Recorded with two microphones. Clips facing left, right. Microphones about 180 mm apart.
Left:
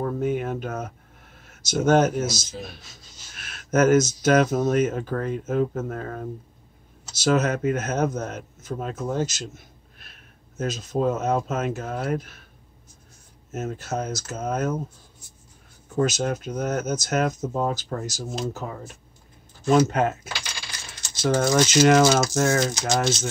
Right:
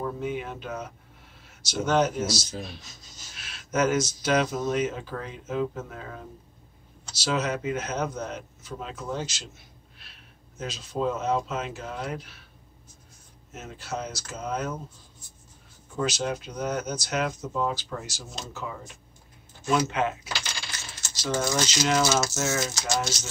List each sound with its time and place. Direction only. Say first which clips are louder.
0.0 s speech: left 6 dB; 50° left (ahead or behind)
13.5 s speech: left 7 dB; 45° left (ahead or behind)
16.0 s speech: left 5 dB; 45° left (ahead or behind)
21.2 s speech: left 7 dB; 55° left (ahead or behind)